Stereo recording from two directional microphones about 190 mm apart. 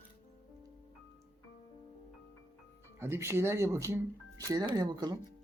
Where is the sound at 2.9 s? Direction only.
15° right (ahead or behind).